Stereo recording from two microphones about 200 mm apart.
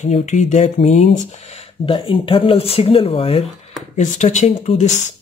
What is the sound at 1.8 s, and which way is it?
Speech, 25° left (ahead or behind).